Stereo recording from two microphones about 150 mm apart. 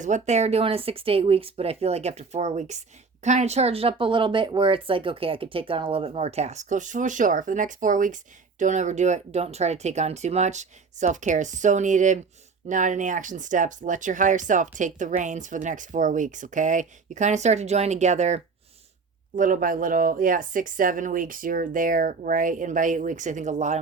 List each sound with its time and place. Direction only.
0.0 s speech: 50° right (ahead or behind)
19.4 s speech: 65° right (ahead or behind)